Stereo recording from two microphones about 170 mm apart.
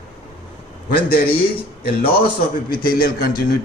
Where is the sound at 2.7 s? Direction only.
60° left (ahead or behind).